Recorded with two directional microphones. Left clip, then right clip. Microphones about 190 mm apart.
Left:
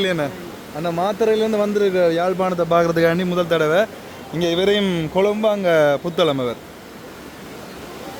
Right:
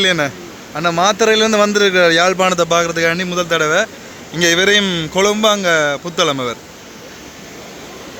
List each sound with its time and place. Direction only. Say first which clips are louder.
0.0 s a man's voice: right 6 dB; centre (ahead or behind)
2.7 s a man's voice: right 1 dB; 25° left (ahead or behind); by 5.6 s 5° right (ahead or behind)
5.6 s speech: right 1 dB; 15° left (ahead or behind)